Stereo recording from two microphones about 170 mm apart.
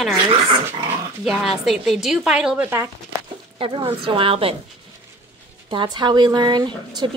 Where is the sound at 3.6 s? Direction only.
30° right (ahead or behind).